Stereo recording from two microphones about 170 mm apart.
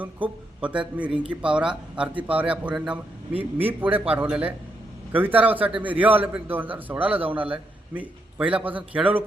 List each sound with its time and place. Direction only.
0.0 s a man's voice: 10° right (ahead or behind)